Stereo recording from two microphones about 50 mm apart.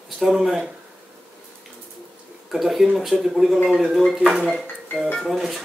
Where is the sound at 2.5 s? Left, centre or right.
Centre.